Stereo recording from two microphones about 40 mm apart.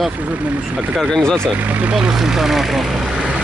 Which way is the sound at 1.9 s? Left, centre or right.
Centre.